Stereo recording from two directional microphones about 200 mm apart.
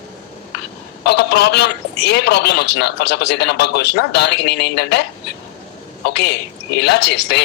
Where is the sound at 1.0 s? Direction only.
55° left (ahead or behind).